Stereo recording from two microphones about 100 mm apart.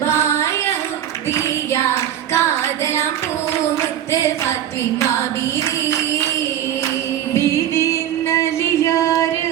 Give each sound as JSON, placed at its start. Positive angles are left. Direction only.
{"t": 0.0, "sound": "singing", "side_deg": 25}
{"t": 2.3, "sound": "music", "side_deg": 25}
{"t": 4.1, "sound": "a sound", "side_deg": 25}
{"t": 5.5, "sound": "music", "side_deg": 30}
{"t": 7.3, "sound": "music", "side_deg": 25}